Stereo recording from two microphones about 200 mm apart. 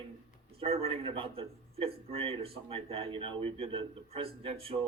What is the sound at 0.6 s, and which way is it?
A man's voice, 30° right (ahead or behind).